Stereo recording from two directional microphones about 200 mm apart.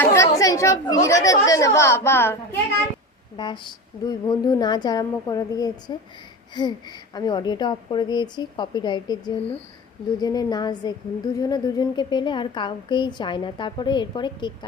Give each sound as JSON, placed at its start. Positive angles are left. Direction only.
{"t": 0.0, "sound": "speech", "side_deg": 15}
{"t": 3.3, "sound": "a woman's voice", "side_deg": 25}